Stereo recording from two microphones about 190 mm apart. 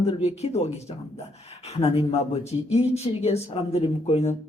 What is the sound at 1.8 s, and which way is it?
Speech, 30° left (ahead or behind).